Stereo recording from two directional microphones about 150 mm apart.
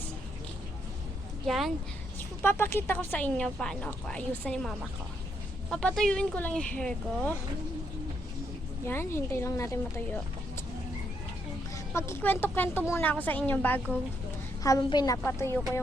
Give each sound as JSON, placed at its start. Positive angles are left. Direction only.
{"t": 1.5, "sound": "speech", "side_deg": 0}
{"t": 2.4, "sound": "a woman's voice", "side_deg": 15}
{"t": 5.7, "sound": "a woman's voice", "side_deg": 5}
{"t": 8.9, "sound": "a woman's voice", "side_deg": 15}
{"t": 11.7, "sound": "a woman's voice", "side_deg": 20}
{"t": 14.6, "sound": "a woman's voice", "side_deg": 25}